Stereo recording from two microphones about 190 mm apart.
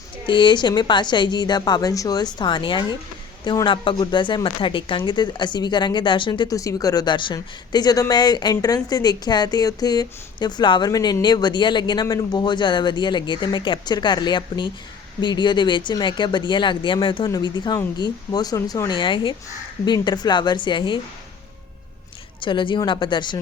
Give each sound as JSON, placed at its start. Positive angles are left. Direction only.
{"t": 0.3, "sound": "speech", "side_deg": 25}
{"t": 22.4, "sound": "speech", "side_deg": 25}